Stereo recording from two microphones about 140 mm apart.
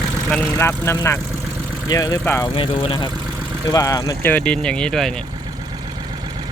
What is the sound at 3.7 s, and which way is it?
Speech, 25° left (ahead or behind).